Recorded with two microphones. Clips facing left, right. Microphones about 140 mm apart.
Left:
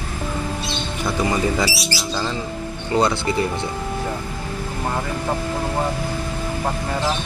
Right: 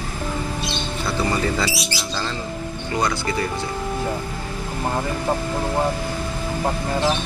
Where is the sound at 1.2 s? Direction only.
15° left (ahead or behind).